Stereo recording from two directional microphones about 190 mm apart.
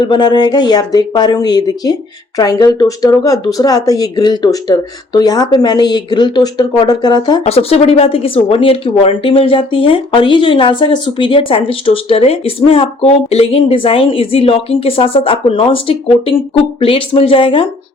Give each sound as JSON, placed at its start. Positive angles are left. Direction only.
{"t": 0.0, "sound": "speech", "side_deg": 25}